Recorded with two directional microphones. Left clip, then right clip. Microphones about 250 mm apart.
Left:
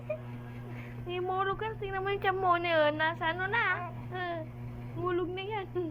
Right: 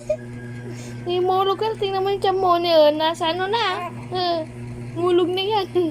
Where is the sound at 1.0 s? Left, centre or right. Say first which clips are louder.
Right 13 dB; right.